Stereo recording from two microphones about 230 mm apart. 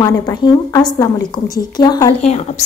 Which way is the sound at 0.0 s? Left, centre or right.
Centre.